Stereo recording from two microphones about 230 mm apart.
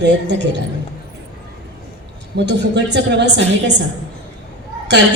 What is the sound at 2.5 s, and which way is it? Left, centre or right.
Speech, right.